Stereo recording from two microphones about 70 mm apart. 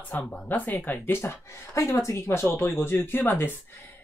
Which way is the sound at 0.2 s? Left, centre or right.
Left.